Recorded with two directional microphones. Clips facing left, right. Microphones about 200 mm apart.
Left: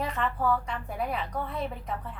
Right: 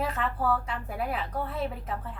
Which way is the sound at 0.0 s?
5° right (ahead or behind).